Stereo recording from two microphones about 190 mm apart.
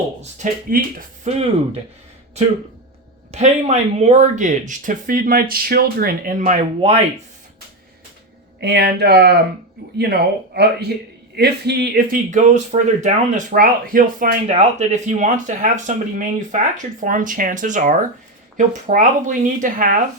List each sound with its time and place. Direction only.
0.2 s speech: 40° right (ahead or behind)
3.3 s speech: 35° right (ahead or behind)
8.6 s speech: 60° right (ahead or behind)